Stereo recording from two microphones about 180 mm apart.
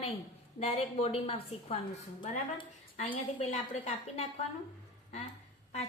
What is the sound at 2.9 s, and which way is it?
A woman's voice, 35° left (ahead or behind).